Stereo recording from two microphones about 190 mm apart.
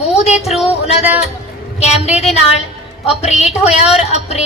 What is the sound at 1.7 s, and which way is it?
A woman's voice, 35° left (ahead or behind).